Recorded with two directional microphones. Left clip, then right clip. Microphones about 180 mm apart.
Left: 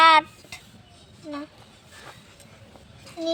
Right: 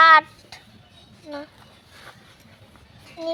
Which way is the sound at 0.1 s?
10° right (ahead or behind).